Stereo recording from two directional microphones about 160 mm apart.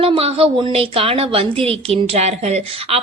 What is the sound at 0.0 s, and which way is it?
A woman's voice, 35° right (ahead or behind).